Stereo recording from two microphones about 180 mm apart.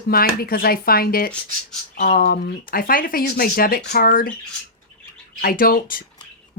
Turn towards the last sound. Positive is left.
turn(degrees=50)  # may be behind; listen again after turning